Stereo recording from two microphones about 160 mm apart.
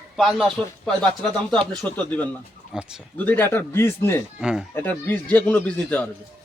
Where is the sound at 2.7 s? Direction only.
5° right (ahead or behind).